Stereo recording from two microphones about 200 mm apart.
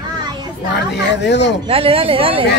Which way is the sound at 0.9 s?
60° left (ahead or behind).